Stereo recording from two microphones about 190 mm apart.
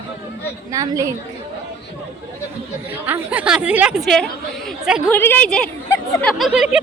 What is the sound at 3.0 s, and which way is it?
A woman's voice, 10° right (ahead or behind).